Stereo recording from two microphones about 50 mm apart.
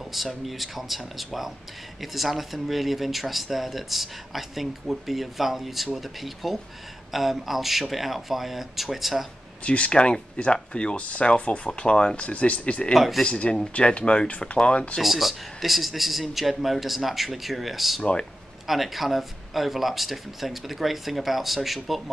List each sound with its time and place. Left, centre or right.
0.0 s speech: centre
9.6 s speech: left
12.9 s speech: centre
13.2 s speech: left
15.0 s speech: centre